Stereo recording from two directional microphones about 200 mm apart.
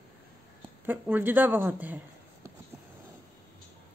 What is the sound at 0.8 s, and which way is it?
A woman's voice, 10° right (ahead or behind).